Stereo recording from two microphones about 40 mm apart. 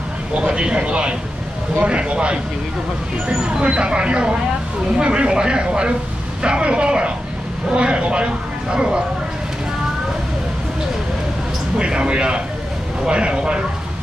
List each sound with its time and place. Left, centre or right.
0.4 s speech: right
3.4 s speech: right
11.8 s speech: right